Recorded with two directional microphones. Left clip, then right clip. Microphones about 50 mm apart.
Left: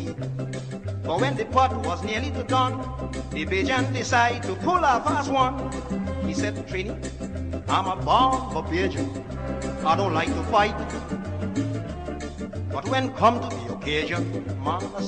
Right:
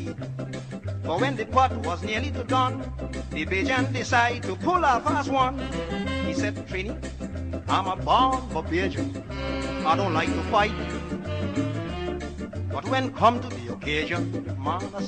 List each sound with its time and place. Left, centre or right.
1.0 s music: centre
9.8 s speech: centre
10.1 s music: centre
12.7 s speech: centre
14.0 s music: centre